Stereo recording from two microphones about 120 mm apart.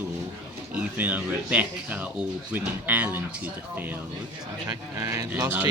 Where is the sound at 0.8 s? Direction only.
10° right (ahead or behind).